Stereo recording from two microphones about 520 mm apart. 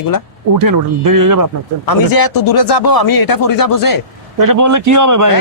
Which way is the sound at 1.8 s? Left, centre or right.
Left.